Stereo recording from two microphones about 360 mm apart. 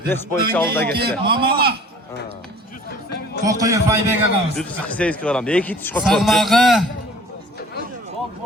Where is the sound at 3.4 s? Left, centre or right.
Centre.